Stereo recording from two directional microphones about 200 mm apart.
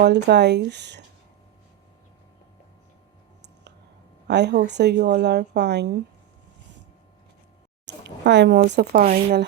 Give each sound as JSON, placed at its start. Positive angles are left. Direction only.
{"t": 0.0, "sound": "a woman's voice", "side_deg": -55}
{"t": 4.3, "sound": "a woman's voice", "side_deg": -55}
{"t": 7.9, "sound": "speech", "side_deg": -60}